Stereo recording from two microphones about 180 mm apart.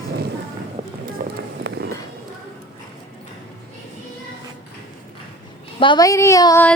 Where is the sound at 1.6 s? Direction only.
70° right (ahead or behind).